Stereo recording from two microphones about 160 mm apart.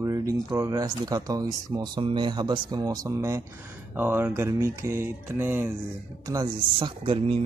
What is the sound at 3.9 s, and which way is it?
Mantra, 10° right (ahead or behind).